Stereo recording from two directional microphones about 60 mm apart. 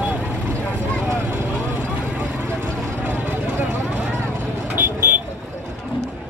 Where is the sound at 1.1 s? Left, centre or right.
Right.